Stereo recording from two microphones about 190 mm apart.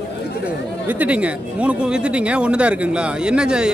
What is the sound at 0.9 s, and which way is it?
Speech, 10° right (ahead or behind).